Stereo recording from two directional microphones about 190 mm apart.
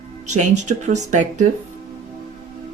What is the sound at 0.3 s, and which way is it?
Speech, 40° right (ahead or behind).